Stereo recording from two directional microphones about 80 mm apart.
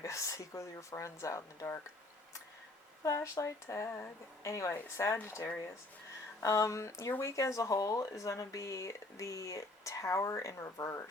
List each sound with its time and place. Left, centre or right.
0.0 s speech: left
3.0 s speech: left
4.8 s speech: left
6.4 s speech: left